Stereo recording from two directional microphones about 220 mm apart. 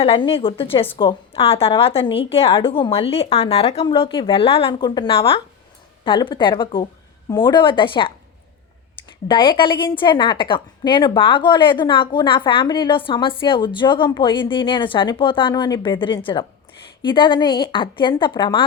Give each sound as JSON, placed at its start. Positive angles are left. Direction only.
{"t": 0.0, "sound": "a woman's voice", "side_deg": 25}
{"t": 9.2, "sound": "a woman's voice", "side_deg": 20}